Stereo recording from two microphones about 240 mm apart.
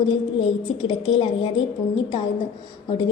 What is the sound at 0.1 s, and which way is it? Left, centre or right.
A woman's voice, left.